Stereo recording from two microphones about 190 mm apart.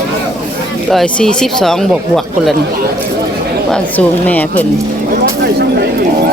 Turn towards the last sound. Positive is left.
turn(degrees=-60)  # may be behind; listen again after turning